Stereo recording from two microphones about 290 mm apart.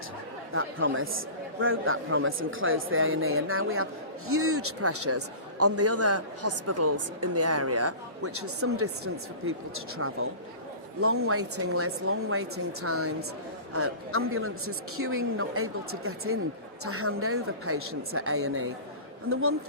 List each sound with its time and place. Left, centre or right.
0.5 s a man's voice: right
10.0 s a man's voice: right